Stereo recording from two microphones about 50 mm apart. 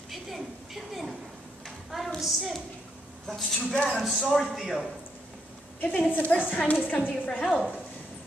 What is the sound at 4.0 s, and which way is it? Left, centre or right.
Speech, centre.